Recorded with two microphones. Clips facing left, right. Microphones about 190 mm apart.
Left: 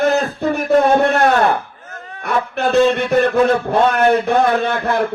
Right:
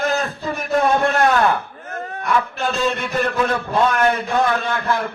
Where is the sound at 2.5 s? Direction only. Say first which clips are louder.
Left 8 dB; 60° left (ahead or behind).